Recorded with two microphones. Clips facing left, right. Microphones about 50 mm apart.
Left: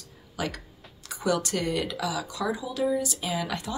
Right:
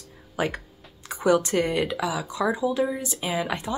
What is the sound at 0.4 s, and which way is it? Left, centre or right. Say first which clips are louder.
Speech: right 5 dB; right.